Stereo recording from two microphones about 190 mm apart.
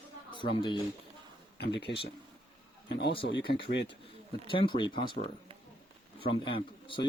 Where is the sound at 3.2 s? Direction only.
60° left (ahead or behind).